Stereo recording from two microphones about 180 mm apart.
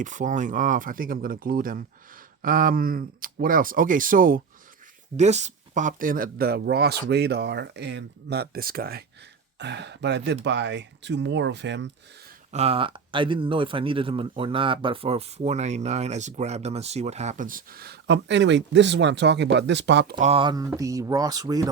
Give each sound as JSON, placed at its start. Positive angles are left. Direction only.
{"t": 0.0, "sound": "speech", "side_deg": -45}
{"t": 5.1, "sound": "speech", "side_deg": -40}
{"t": 9.6, "sound": "speech", "side_deg": -75}
{"t": 12.5, "sound": "speech", "side_deg": -35}
{"t": 20.1, "sound": "speech", "side_deg": -35}